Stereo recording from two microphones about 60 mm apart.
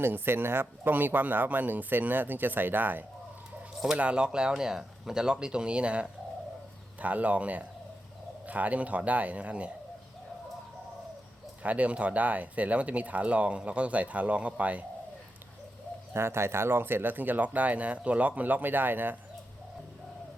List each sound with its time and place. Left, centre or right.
0.0 s speech: right
3.9 s speech: centre
11.6 s speech: right
16.1 s speech: right